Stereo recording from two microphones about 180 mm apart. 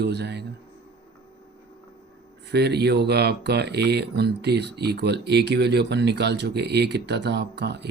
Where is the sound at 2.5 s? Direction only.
65° right (ahead or behind).